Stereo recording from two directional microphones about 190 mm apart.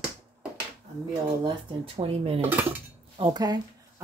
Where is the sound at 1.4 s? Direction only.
30° right (ahead or behind).